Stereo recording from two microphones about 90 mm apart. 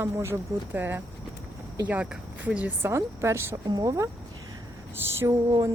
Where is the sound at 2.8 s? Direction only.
30° right (ahead or behind).